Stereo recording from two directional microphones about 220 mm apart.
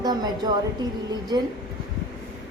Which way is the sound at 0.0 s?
20° right (ahead or behind).